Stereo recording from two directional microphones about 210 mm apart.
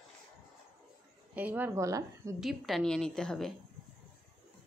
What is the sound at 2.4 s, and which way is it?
A woman's voice, centre (ahead or behind).